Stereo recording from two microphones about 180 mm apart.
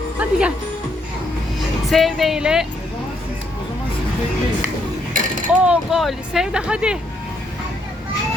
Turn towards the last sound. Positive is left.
turn(degrees=-5)  # may be behind; listen again after turning